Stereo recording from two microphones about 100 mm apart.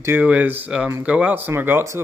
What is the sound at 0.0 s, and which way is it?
Speech, 20° right (ahead or behind).